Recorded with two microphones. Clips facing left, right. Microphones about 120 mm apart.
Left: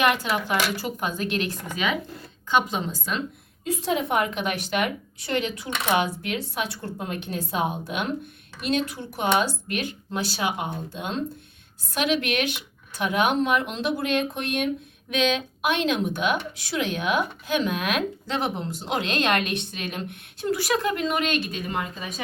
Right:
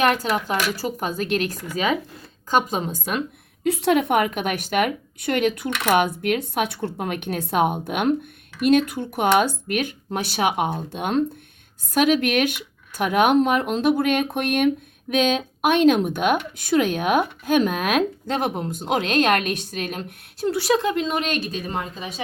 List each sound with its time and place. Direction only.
0.0 s a woman's voice: 40° right (ahead or behind)
3.6 s a woman's voice: 70° right (ahead or behind)
11.9 s speech: 45° right (ahead or behind)
15.1 s speech: 45° right (ahead or behind)